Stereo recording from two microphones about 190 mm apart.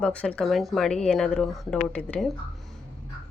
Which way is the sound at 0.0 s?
5° left (ahead or behind).